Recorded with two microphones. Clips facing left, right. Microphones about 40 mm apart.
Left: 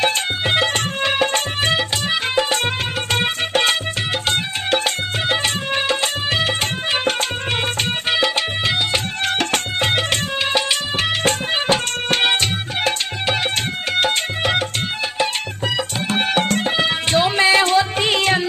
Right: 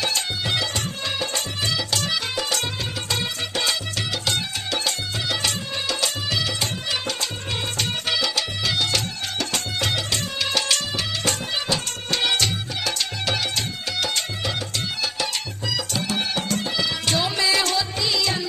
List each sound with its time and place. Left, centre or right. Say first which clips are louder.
0.0 s music: left 6 dB; left
9.2 s music: left 7 dB; left
16.1 s music: left 9 dB; left